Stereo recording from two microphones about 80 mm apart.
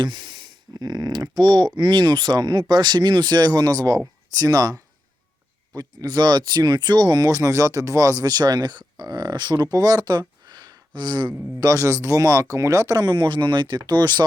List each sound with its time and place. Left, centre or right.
0.0 s speech: right
11.6 s speech: right
13.1 s speech: right